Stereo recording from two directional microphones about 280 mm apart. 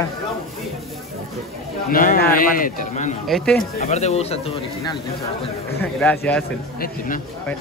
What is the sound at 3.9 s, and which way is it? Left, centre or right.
A man's voice, left.